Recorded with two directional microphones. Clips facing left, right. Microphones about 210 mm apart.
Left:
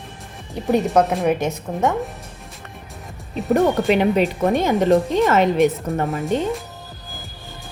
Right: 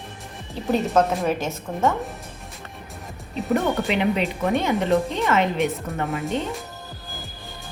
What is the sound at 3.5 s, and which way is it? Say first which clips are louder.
Speech: left 6 dB; 45° left (ahead or behind).